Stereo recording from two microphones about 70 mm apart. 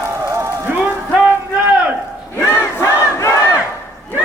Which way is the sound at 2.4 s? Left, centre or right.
Left.